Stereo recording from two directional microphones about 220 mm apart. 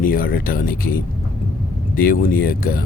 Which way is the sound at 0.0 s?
40° left (ahead or behind).